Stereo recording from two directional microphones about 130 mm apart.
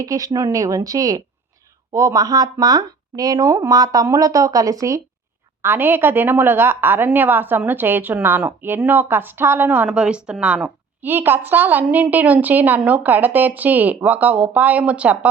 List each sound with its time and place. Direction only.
0.0 s a woman's voice: 25° right (ahead or behind); by 15.3 s 10° right (ahead or behind)